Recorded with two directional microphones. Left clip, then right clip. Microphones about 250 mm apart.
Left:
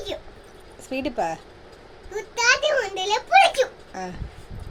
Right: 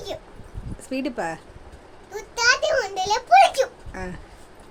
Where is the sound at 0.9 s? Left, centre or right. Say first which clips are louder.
Left 2 dB; centre.